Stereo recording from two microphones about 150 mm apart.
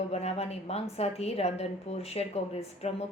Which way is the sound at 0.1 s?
45° left (ahead or behind).